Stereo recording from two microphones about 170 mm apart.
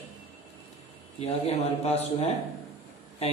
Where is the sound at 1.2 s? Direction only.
40° left (ahead or behind).